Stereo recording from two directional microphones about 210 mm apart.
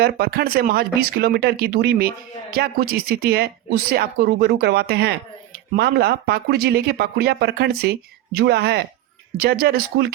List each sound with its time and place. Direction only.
0.0 s speech: 45° right (ahead or behind)